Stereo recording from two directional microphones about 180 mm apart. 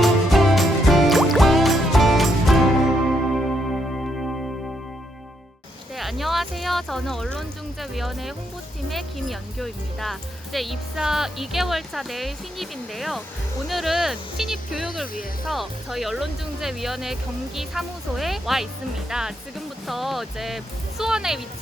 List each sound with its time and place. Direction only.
0.0 s music: centre (ahead or behind)
6.0 s a sound: centre (ahead or behind)
8.9 s speech: centre (ahead or behind)
15.0 s speech: 50° left (ahead or behind)
15.4 s speech: centre (ahead or behind)